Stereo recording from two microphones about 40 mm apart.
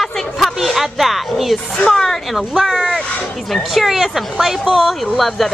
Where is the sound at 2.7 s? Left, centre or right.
Centre.